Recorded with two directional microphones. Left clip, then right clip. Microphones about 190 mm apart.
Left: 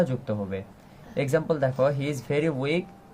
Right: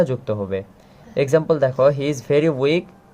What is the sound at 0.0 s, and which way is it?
Speech, 55° right (ahead or behind).